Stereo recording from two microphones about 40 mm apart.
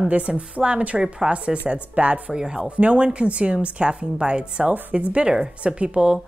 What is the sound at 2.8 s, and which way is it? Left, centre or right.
A woman's voice, right.